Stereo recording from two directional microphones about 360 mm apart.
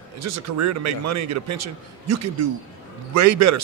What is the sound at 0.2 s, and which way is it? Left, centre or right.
A man's voice, right.